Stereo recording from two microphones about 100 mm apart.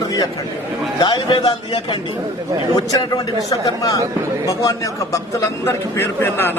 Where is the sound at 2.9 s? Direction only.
40° left (ahead or behind).